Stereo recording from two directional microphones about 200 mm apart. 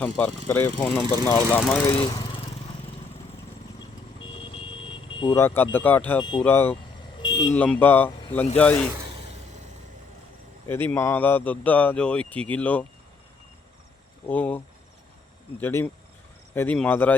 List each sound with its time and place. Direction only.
0.0 s speech: 10° left (ahead or behind)
4.2 s vehicle: 25° left (ahead or behind)
5.7 s speech: 10° left (ahead or behind)
6.1 s speech: 25° left (ahead or behind)
6.4 s speech: 10° left (ahead or behind)
7.2 s vehicle: 20° left (ahead or behind)
7.5 s speech: 10° left (ahead or behind)
10.7 s speech: 10° left (ahead or behind)
14.3 s speech: 10° left (ahead or behind)
15.6 s speech: 10° left (ahead or behind)